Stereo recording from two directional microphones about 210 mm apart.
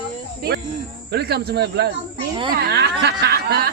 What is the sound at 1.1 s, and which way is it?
Speech, 50° right (ahead or behind).